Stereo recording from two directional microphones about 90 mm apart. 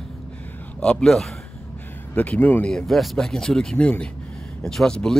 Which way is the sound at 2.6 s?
5° left (ahead or behind).